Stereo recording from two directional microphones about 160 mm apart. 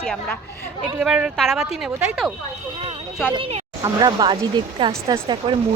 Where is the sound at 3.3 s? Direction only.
35° right (ahead or behind).